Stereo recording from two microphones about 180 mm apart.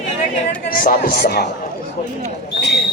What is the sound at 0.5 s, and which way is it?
Speech, 55° left (ahead or behind).